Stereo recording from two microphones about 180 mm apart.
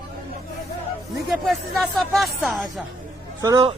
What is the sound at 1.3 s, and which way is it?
Speech, centre (ahead or behind).